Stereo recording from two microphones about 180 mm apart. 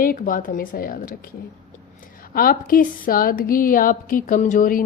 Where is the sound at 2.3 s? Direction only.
55° left (ahead or behind).